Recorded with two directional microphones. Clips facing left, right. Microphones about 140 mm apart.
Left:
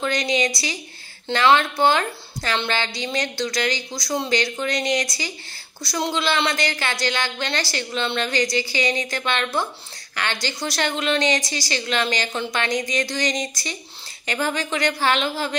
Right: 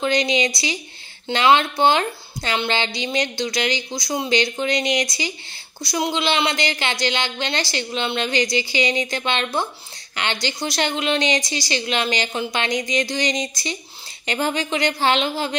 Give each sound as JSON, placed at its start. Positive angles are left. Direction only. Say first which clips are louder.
{"t": 0.0, "sound": "a woman's voice", "louder": "right 2 dB", "side_deg": -20}